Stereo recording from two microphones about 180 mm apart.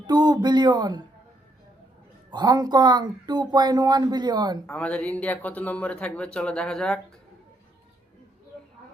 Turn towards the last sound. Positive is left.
turn(degrees=5)  # may be behind; listen again after turning